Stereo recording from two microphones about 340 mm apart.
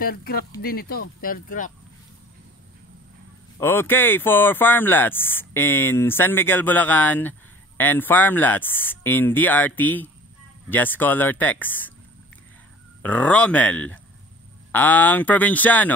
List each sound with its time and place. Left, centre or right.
0.0 s speech: left
3.5 s speech: centre
13.0 s speech: centre